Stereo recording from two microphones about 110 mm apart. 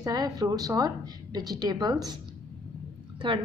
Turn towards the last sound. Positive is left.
turn(degrees=-50)  # may be behind; listen again after turning